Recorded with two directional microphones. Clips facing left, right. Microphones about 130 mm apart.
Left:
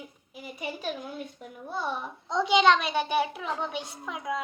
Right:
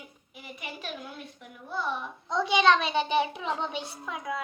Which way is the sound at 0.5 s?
35° left (ahead or behind).